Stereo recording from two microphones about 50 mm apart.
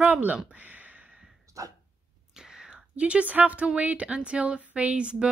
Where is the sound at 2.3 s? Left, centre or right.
Centre; by 3.7 s right.